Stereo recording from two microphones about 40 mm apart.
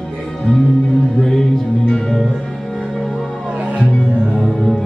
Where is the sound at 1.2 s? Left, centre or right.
Centre.